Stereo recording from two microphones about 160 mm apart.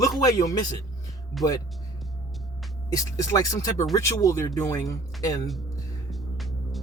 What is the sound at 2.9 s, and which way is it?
Speech, 20° left (ahead or behind).